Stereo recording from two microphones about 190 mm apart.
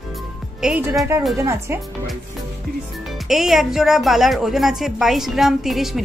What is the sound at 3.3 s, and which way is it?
Speech, centre (ahead or behind).